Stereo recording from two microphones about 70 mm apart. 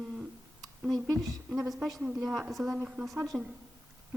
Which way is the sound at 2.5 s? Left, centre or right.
Centre.